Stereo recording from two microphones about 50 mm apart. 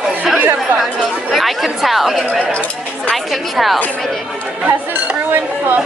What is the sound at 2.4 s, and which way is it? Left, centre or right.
Speech, left.